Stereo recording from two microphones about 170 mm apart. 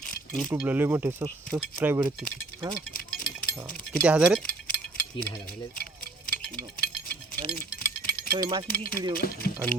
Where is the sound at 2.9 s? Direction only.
55° left (ahead or behind).